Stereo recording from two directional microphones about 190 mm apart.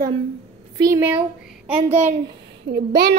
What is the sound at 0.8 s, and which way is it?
A woman's voice, 15° right (ahead or behind).